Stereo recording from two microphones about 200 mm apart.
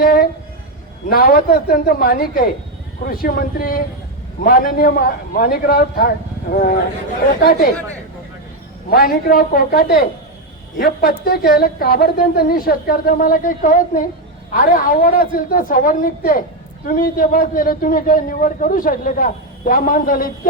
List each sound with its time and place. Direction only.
0.0 s a sound: 50° left (ahead or behind)
1.1 s a man's voice: 50° left (ahead or behind)
8.9 s a man's voice: 45° left (ahead or behind)